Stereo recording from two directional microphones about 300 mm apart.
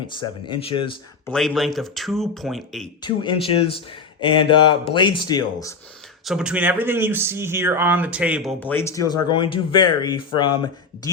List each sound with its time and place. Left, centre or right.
0.2 s speech: centre
1.3 s speech: centre
3.2 s speech: centre
6.2 s speech: centre